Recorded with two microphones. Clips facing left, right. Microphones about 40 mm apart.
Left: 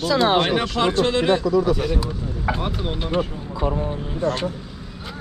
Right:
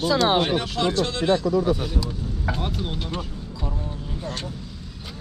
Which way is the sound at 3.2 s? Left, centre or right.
Left.